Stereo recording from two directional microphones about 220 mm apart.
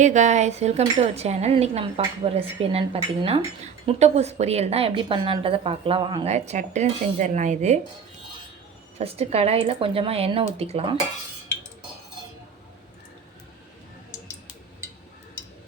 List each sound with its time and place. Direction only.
0.0 s a woman's voice: 35° right (ahead or behind)
9.0 s a woman's voice: 25° right (ahead or behind)